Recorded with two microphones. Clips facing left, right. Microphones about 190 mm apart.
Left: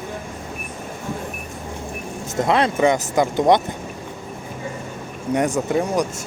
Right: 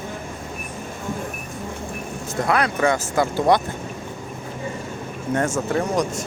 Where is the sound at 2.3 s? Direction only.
20° left (ahead or behind).